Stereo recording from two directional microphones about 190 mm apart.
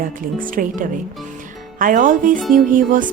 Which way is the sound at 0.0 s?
45° right (ahead or behind).